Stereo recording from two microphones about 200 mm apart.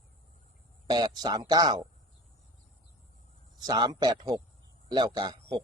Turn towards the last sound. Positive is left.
turn(degrees=-20)  # may be behind; listen again after turning